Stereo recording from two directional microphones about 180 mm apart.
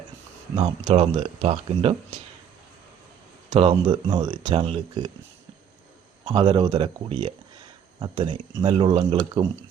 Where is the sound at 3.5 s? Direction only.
25° right (ahead or behind).